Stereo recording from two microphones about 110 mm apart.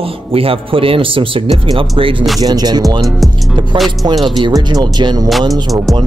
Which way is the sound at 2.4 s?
35° right (ahead or behind).